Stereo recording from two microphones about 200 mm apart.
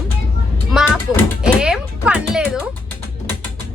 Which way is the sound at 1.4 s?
5° right (ahead or behind).